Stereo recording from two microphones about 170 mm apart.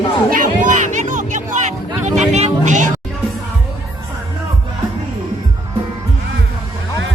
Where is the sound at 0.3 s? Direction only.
50° right (ahead or behind).